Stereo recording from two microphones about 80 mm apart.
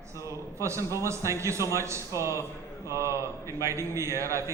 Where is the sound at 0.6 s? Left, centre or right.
Right.